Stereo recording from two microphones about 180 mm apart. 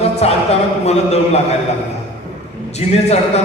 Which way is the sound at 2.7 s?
35° left (ahead or behind).